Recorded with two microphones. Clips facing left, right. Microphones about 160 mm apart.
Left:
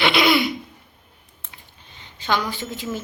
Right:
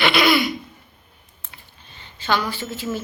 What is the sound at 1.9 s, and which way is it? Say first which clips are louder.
A woman's voice: right 1 dB; 15° left (ahead or behind).